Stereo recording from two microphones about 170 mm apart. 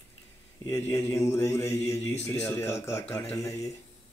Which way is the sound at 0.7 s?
15° left (ahead or behind).